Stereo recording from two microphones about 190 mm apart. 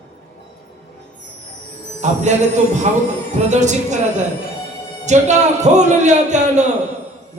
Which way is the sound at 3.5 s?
40° right (ahead or behind).